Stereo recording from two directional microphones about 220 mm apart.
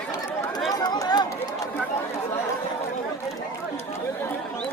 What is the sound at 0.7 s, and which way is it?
Chatter, 15° left (ahead or behind).